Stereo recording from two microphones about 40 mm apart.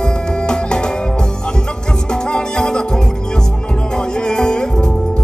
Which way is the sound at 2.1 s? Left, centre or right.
Centre.